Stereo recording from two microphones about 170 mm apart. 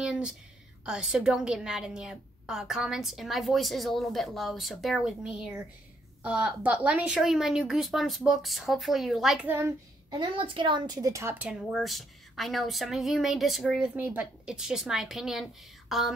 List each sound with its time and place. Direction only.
0.0 s a woman's voice: 5° right (ahead or behind)
10.1 s a woman's voice: 30° right (ahead or behind); by 11.5 s 10° right (ahead or behind)
11.6 s a woman's voice: centre (ahead or behind)